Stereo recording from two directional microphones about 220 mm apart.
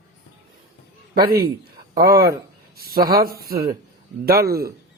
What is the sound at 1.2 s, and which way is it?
A man's voice, 45° right (ahead or behind).